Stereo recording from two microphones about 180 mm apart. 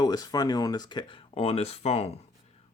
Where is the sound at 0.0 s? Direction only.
20° left (ahead or behind).